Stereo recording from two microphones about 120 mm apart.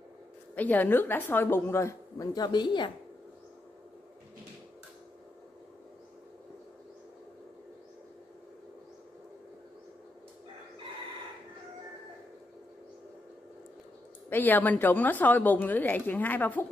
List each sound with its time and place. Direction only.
0.6 s a woman's voice: 15° left (ahead or behind); by 2.9 s 40° left (ahead or behind)
14.3 s a woman's voice: 15° left (ahead or behind)